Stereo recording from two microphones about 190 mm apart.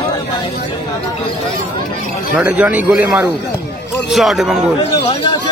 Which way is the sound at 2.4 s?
5° right (ahead or behind).